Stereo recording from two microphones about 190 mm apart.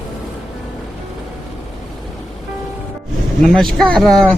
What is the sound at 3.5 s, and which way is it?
Speech, 5° left (ahead or behind).